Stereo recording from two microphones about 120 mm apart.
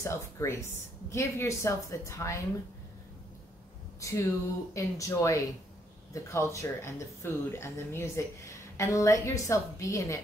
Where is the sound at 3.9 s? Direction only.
25° left (ahead or behind).